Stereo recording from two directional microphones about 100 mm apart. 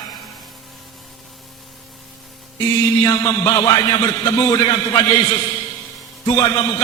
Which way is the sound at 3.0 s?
35° left (ahead or behind).